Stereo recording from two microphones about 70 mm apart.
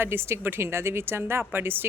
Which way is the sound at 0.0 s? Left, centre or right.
Right.